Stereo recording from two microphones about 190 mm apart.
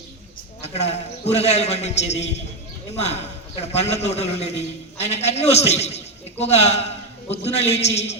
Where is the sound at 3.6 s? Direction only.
35° left (ahead or behind).